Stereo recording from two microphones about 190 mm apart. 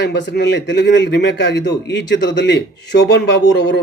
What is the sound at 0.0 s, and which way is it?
A man's voice, 65° left (ahead or behind).